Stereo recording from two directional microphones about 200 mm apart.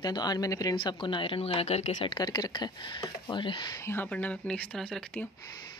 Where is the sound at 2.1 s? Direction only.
20° left (ahead or behind); by 5.2 s 5° left (ahead or behind).